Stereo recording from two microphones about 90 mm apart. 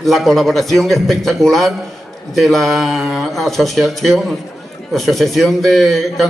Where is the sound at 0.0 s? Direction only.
Centre (ahead or behind).